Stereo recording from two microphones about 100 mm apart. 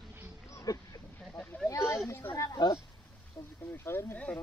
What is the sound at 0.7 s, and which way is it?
Speech, 35° left (ahead or behind).